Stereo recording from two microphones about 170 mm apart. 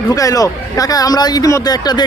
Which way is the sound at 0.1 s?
20° left (ahead or behind).